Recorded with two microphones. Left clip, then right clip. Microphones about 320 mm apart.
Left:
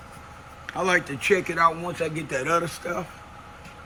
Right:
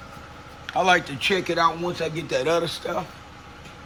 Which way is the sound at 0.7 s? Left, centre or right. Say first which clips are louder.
Right 4 dB; right.